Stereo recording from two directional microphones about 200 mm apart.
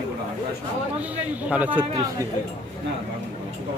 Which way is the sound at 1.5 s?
10° right (ahead or behind).